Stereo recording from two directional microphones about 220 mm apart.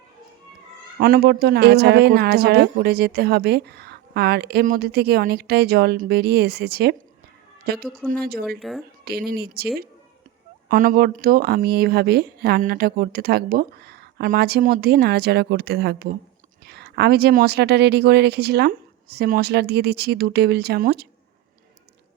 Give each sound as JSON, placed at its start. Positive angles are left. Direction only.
{"t": 0.9, "sound": "a woman's voice", "side_deg": -45}
{"t": 7.9, "sound": "speech", "side_deg": 0}
{"t": 9.0, "sound": "a woman's voice", "side_deg": -45}
{"t": 10.7, "sound": "a woman's voice", "side_deg": -40}